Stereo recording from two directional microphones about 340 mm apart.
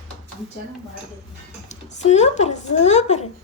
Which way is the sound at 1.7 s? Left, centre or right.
Centre.